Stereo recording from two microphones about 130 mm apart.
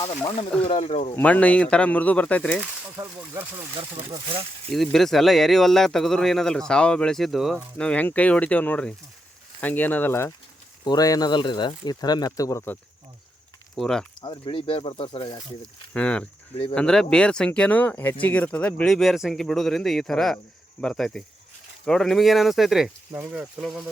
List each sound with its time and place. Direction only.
0.0 s speech: 40° left (ahead or behind)
1.1 s speech: 10° left (ahead or behind)
2.9 s speech: 20° right (ahead or behind)
3.8 s speech: 45° right (ahead or behind)
4.7 s speech: centre (ahead or behind); by 10.3 s 20° left (ahead or behind)
10.8 s speech: 30° left (ahead or behind)
13.7 s speech: 5° left (ahead or behind)
14.2 s speech: 40° left (ahead or behind)
15.9 s speech: 10° left (ahead or behind)